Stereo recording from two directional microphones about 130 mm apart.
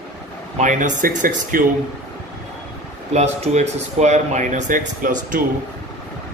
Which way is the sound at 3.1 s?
60° right (ahead or behind).